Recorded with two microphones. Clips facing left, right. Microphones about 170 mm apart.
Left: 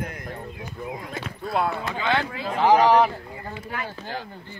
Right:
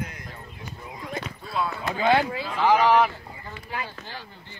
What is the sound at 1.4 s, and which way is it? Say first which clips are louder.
Speech: left 5 dB; 55° left (ahead or behind).